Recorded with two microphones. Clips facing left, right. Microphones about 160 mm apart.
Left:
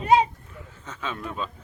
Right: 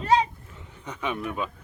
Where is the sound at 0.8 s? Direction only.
15° right (ahead or behind).